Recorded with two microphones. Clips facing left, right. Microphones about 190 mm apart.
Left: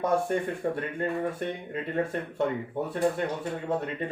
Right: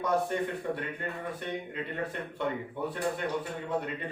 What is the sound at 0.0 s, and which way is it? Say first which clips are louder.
Speech: left 3 dB; 50° left (ahead or behind).